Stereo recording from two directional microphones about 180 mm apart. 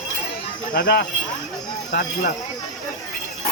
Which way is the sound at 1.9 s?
50° left (ahead or behind).